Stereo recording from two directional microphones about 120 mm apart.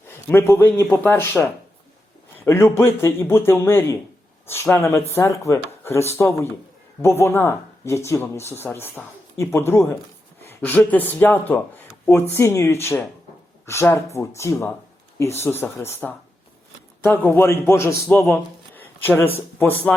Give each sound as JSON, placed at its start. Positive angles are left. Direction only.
{"t": 0.1, "sound": "speech", "side_deg": 20}
{"t": 10.4, "sound": "a sound", "side_deg": 15}
{"t": 10.8, "sound": "a man's voice", "side_deg": 15}
{"t": 18.3, "sound": "shuffling cards", "side_deg": 15}
{"t": 19.5, "sound": "speech", "side_deg": 15}